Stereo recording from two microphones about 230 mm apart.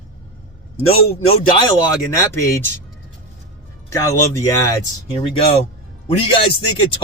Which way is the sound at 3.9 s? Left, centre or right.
Centre.